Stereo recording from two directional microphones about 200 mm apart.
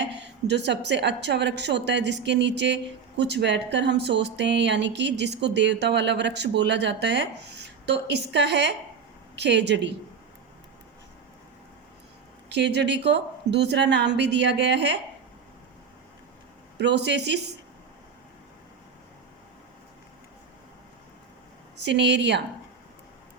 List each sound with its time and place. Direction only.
0.2 s a woman's voice: 60° right (ahead or behind)
12.5 s a woman's voice: 60° right (ahead or behind)
16.7 s a woman's voice: 60° right (ahead or behind)
21.8 s a woman's voice: 60° right (ahead or behind)